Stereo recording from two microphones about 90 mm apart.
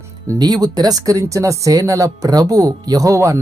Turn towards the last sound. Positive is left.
turn(degrees=-35)  # may be behind; listen again after turning